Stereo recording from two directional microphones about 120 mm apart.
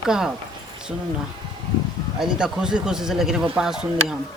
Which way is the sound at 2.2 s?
5° right (ahead or behind).